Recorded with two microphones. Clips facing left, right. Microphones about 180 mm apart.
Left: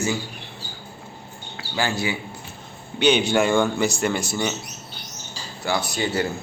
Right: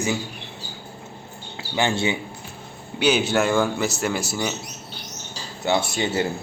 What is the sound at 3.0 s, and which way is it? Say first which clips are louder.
Speech: left 1 dB; 5° right (ahead or behind).